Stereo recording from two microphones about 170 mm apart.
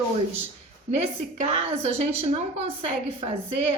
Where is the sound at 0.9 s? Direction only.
40° right (ahead or behind).